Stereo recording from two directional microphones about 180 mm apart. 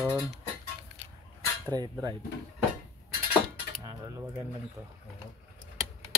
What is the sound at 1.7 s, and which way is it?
Speech, 20° right (ahead or behind).